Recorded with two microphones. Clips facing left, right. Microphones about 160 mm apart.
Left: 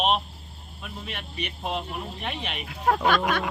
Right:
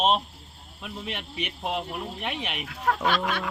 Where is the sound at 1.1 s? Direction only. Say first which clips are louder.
Right 1 dB; 15° right (ahead or behind).